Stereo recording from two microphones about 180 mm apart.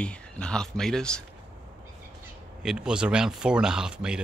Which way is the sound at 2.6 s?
5° right (ahead or behind).